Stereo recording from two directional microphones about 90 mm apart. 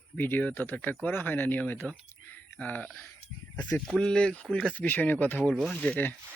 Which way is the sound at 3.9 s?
5° left (ahead or behind).